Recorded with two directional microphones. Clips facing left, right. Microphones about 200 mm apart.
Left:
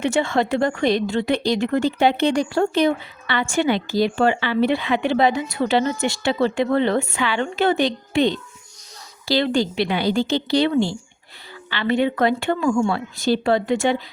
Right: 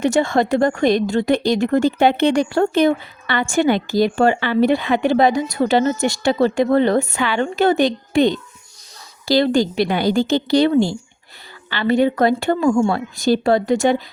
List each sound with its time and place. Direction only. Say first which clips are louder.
0.0 s a woman's voice: right 3 dB; 45° right (ahead or behind)